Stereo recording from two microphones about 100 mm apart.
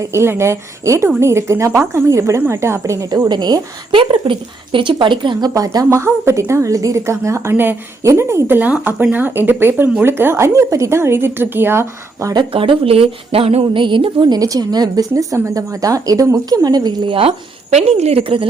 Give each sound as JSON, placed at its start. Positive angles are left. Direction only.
{"t": 0.0, "sound": "a woman's voice", "side_deg": -25}
{"t": 3.2, "sound": "a woman's voice", "side_deg": -45}
{"t": 3.9, "sound": "a woman's voice", "side_deg": -60}
{"t": 5.5, "sound": "a woman's voice", "side_deg": -35}
{"t": 12.5, "sound": "speech", "side_deg": -70}
{"t": 13.7, "sound": "a woman's voice", "side_deg": -55}